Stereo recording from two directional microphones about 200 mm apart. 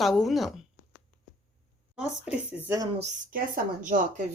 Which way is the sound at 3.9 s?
35° right (ahead or behind).